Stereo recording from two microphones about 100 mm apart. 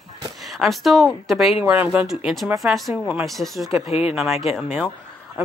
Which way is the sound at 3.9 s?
90° left.